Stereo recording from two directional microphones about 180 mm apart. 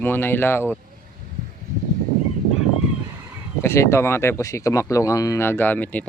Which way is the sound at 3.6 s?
15° left (ahead or behind).